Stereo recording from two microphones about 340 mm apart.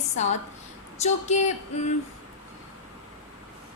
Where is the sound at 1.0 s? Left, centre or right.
Centre.